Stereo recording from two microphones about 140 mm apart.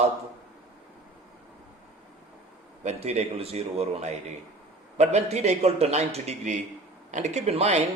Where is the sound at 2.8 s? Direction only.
50° right (ahead or behind).